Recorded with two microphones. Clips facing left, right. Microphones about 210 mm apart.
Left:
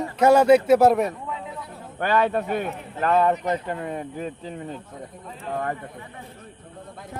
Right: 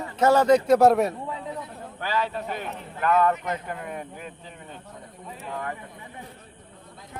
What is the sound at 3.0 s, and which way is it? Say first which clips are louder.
Speech: left 2 dB; 30° left (ahead or behind).